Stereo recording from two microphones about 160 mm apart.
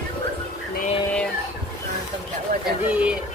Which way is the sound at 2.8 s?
5° right (ahead or behind).